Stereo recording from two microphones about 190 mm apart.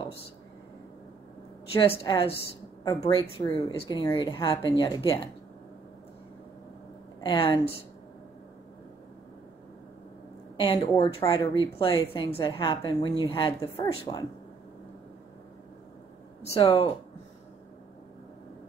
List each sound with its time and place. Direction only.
1.8 s a woman's voice: 25° left (ahead or behind)
7.2 s a woman's voice: 25° left (ahead or behind)
10.6 s a woman's voice: 25° left (ahead or behind)
16.5 s speech: 30° left (ahead or behind)